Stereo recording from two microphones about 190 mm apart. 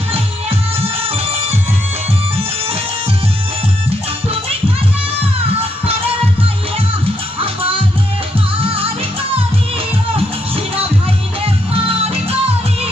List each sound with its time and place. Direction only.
7.3 s music: 30° right (ahead or behind)
11.7 s music: 30° right (ahead or behind)